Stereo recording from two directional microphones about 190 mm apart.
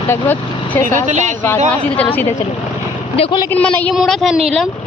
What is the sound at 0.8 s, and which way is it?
Speech, 40° right (ahead or behind).